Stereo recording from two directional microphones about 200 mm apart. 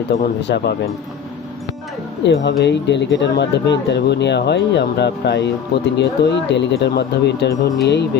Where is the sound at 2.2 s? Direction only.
60° left (ahead or behind).